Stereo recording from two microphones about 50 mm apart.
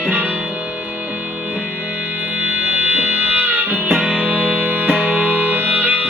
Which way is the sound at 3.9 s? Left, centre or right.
Centre.